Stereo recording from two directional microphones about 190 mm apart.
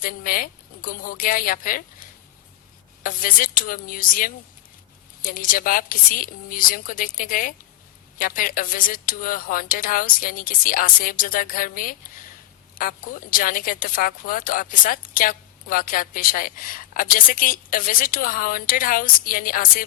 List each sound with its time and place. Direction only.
0.0 s a woman's voice: 50° left (ahead or behind)